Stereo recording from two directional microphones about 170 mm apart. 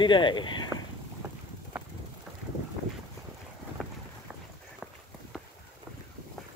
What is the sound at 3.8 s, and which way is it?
Boat, centre (ahead or behind).